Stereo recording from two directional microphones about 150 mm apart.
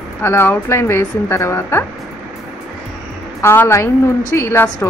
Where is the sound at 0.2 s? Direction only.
15° left (ahead or behind).